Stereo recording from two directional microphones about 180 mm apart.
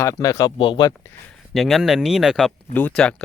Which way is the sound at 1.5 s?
Centre (ahead or behind).